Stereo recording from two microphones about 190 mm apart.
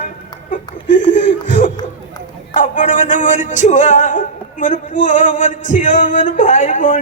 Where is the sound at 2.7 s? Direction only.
40° left (ahead or behind).